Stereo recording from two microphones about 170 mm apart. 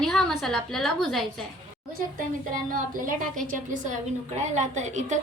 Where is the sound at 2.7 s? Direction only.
55° right (ahead or behind).